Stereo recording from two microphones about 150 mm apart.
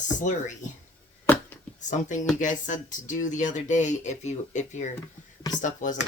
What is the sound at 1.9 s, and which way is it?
Speech, 55° left (ahead or behind).